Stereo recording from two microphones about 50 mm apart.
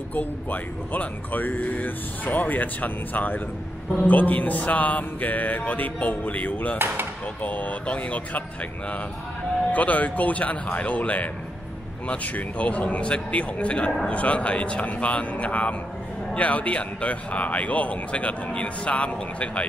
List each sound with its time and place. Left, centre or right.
0.1 s speech: left
9.7 s a man's voice: left